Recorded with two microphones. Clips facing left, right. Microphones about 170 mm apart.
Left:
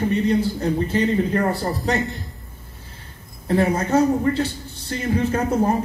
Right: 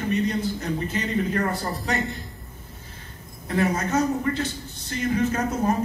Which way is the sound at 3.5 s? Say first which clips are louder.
Left 5 dB; 30° left (ahead or behind).